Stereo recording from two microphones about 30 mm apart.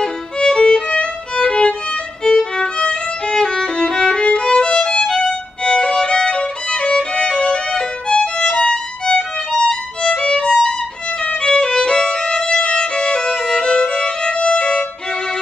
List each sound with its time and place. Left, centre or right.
0.0 s music: left
2.2 s violin: left
5.0 s violin: left
10.4 s violin: left